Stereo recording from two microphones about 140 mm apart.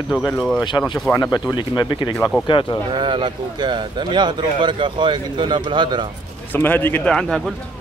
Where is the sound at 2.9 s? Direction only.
35° right (ahead or behind).